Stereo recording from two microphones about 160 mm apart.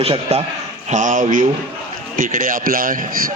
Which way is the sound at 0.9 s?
50° right (ahead or behind).